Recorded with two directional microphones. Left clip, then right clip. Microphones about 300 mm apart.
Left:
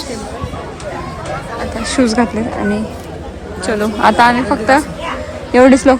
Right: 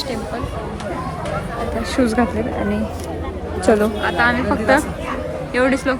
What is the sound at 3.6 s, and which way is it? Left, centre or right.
A woman's voice, centre.